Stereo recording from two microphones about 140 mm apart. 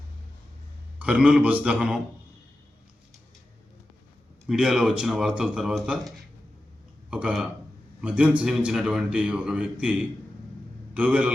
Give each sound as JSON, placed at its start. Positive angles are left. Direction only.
{"t": 0.9, "sound": "a man's voice", "side_deg": -10}
{"t": 4.4, "sound": "a man's voice", "side_deg": -5}